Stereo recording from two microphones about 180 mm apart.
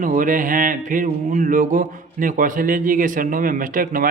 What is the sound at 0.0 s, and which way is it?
Speech, 50° right (ahead or behind).